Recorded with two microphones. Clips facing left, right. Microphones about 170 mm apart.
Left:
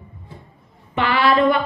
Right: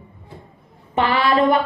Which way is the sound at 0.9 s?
40° right (ahead or behind).